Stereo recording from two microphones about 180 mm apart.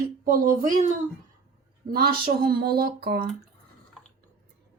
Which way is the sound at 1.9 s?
55° right (ahead or behind).